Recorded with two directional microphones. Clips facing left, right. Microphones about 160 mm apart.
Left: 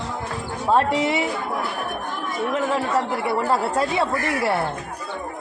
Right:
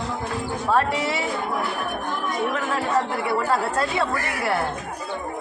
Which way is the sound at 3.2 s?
20° left (ahead or behind).